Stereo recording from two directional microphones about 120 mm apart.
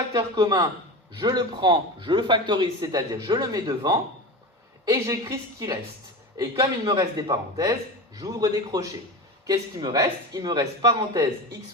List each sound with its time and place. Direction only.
0.1 s a man's voice: 35° right (ahead or behind)
5.3 s a man's voice: 25° right (ahead or behind)